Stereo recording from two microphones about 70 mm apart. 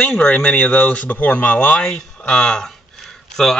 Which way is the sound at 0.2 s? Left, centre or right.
Centre.